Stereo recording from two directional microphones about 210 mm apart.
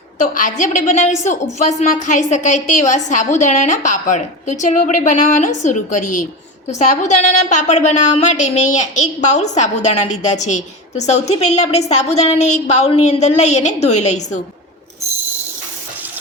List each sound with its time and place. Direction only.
0.2 s a woman's voice: 35° left (ahead or behind)